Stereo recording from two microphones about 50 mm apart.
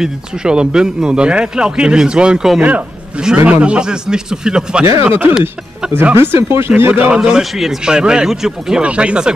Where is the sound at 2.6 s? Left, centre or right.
Right.